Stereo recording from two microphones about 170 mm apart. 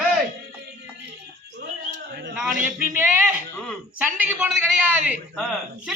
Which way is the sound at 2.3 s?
5° right (ahead or behind).